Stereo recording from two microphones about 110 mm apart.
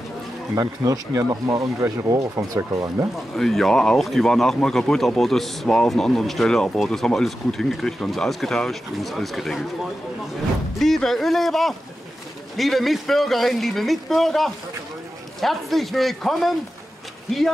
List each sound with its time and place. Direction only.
0.6 s speech: 35° right (ahead or behind)
3.3 s speech: 5° left (ahead or behind)
10.8 s speech: 5° left (ahead or behind)